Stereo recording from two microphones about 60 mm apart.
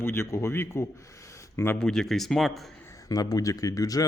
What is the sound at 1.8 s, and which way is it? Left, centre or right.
Speech, centre.